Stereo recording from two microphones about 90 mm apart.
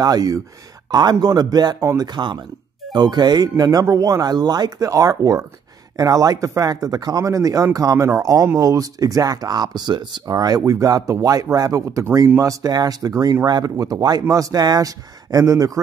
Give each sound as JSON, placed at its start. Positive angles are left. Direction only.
{"t": 0.0, "sound": "speech", "side_deg": -45}
{"t": 10.2, "sound": "speech", "side_deg": -45}